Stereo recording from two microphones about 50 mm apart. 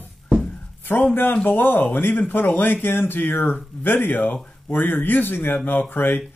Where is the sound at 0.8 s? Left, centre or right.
Left.